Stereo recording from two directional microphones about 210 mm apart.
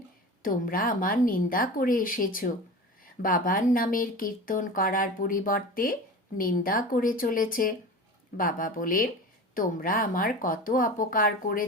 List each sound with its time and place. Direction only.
0.4 s speech: 40° left (ahead or behind)